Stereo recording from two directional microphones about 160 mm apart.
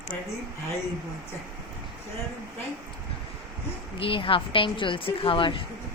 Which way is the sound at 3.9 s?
35° left (ahead or behind).